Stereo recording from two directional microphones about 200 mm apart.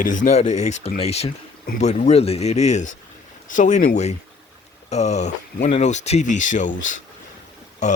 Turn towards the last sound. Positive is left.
turn(degrees=35)  # may be behind; listen again after turning